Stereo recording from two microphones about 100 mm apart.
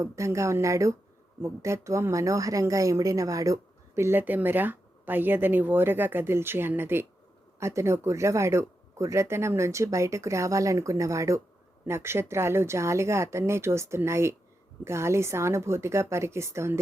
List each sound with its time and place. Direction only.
0.0 s a woman's voice: 30° right (ahead or behind)